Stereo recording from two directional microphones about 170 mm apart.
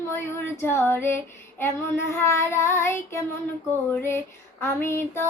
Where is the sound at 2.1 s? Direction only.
15° left (ahead or behind).